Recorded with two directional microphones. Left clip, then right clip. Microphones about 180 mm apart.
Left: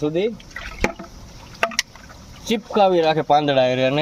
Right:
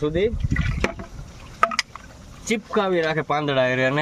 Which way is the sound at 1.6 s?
20° left (ahead or behind).